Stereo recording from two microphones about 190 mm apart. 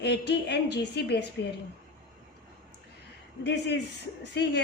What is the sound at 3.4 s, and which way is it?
Speech, 65° left (ahead or behind).